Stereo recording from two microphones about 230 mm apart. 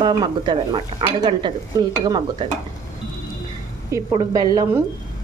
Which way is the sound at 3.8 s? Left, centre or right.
Centre.